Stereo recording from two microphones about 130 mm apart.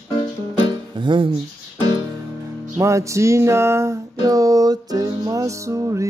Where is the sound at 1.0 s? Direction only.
40° right (ahead or behind).